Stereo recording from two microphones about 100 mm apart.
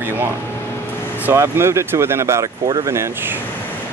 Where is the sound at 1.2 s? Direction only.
25° right (ahead or behind).